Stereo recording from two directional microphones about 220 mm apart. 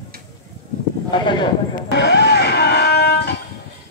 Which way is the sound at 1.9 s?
50° left (ahead or behind).